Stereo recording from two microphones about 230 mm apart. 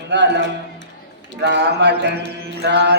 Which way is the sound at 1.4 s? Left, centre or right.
Right.